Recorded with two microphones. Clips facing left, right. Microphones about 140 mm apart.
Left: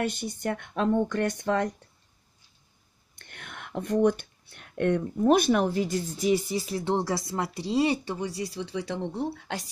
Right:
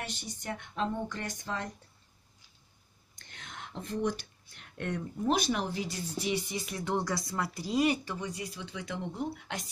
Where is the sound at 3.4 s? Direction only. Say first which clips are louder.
Left 7 dB; 60° left (ahead or behind).